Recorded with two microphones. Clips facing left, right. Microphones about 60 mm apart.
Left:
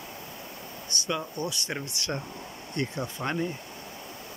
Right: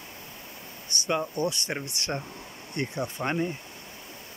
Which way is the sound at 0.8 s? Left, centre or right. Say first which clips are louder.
Right 3 dB; right.